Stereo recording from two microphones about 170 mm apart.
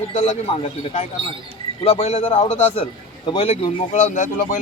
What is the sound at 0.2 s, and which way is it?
A man's voice, 40° left (ahead or behind).